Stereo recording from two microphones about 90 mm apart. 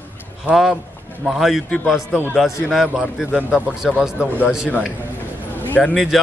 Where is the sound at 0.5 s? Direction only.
5° right (ahead or behind).